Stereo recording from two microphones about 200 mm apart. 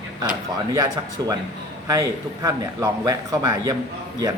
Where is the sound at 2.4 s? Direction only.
20° right (ahead or behind).